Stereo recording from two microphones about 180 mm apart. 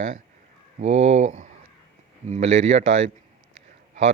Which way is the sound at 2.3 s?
40° right (ahead or behind).